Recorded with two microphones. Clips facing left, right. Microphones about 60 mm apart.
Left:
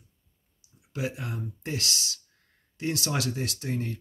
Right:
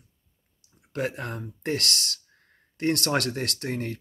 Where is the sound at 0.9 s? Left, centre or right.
Right.